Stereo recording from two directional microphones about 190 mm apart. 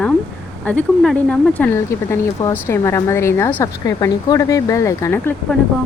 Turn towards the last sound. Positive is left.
turn(degrees=15)  # may be behind; listen again after turning